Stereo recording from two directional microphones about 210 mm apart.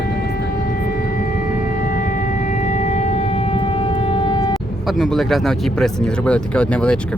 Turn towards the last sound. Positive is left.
turn(degrees=5)  # may be behind; listen again after turning